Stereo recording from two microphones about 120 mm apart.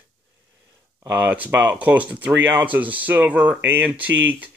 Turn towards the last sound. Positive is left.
turn(degrees=-15)  # may be behind; listen again after turning